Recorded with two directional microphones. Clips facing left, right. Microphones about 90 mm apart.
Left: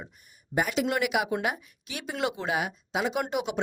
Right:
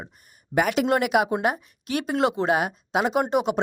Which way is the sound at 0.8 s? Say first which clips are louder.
Right 6 dB; 45° right (ahead or behind).